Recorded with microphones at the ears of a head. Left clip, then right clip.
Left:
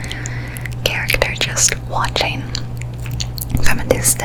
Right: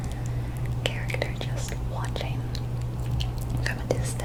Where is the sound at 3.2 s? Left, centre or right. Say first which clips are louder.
Left 10 dB; left.